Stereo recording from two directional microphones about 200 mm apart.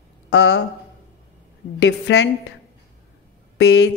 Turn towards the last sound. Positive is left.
turn(degrees=60)  # may be behind; listen again after turning